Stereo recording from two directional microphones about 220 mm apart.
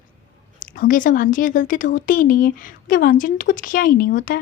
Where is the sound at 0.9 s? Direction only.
35° left (ahead or behind).